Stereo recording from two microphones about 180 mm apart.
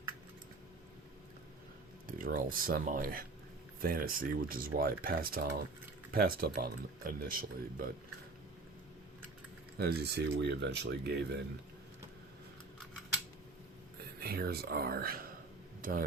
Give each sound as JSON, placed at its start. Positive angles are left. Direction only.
{"t": 2.0, "sound": "speech", "side_deg": -50}
{"t": 9.7, "sound": "speech", "side_deg": -65}
{"t": 14.2, "sound": "speech", "side_deg": -60}